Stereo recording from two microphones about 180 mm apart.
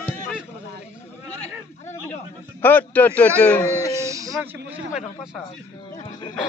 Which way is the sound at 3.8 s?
15° right (ahead or behind).